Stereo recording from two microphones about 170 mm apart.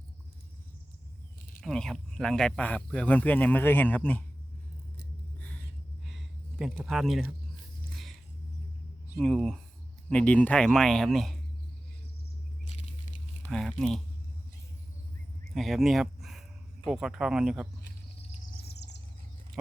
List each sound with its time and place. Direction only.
1.6 s speech: centre (ahead or behind)
6.1 s a sound: centre (ahead or behind)
9.1 s speech: centre (ahead or behind)
13.5 s speech: centre (ahead or behind)
15.4 s speech: centre (ahead or behind)
18.7 s bird: 85° left